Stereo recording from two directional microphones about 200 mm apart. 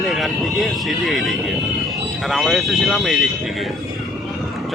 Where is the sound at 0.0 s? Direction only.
Centre (ahead or behind).